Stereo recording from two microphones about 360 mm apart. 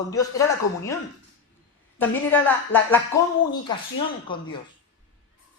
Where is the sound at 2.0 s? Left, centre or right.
Centre.